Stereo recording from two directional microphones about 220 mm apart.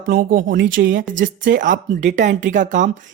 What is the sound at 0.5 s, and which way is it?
Speech, 60° right (ahead or behind).